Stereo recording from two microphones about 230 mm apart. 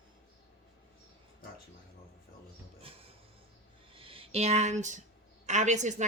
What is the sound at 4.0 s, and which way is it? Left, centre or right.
A woman's voice, right.